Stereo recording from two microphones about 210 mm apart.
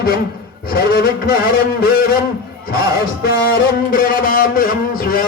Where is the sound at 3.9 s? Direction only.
40° left (ahead or behind).